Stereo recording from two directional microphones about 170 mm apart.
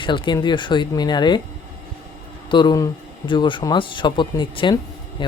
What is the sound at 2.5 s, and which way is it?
Speech, 25° left (ahead or behind).